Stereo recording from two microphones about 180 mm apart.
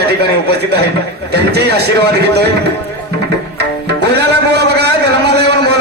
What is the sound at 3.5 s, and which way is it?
Music, 65° right (ahead or behind).